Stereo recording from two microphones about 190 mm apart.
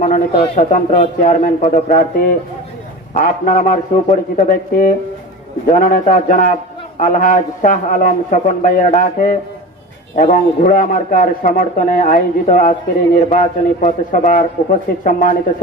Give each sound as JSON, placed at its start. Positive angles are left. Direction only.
{"t": 0.5, "sound": "a man's voice", "side_deg": 40}